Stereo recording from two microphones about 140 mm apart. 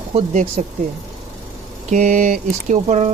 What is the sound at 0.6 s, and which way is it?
Speech, 55° right (ahead or behind).